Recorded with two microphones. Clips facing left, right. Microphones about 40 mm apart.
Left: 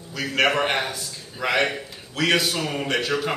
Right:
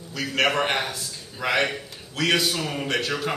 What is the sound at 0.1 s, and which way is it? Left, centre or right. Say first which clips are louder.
A man's voice: left 2 dB; centre.